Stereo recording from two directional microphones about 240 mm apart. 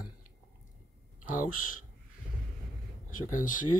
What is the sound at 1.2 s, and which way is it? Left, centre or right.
Speech, left.